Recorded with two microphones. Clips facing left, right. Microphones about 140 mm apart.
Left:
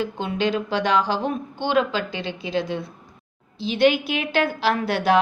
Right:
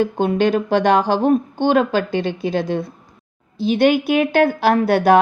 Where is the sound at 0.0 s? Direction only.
50° right (ahead or behind).